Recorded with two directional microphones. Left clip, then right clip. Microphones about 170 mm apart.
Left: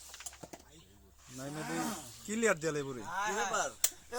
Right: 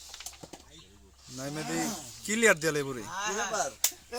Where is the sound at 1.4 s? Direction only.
15° right (ahead or behind).